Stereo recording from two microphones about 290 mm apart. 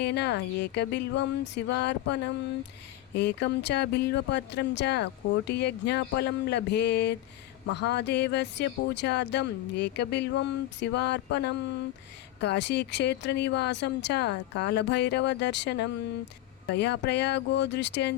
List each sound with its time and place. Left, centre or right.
0.0 s speech: left